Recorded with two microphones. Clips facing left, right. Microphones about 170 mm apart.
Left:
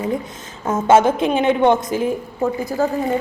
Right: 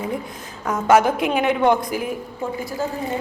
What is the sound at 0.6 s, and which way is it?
A woman's voice, 25° left (ahead or behind).